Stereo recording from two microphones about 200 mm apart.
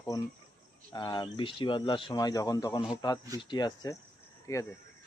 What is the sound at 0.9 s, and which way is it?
Speech, 20° left (ahead or behind).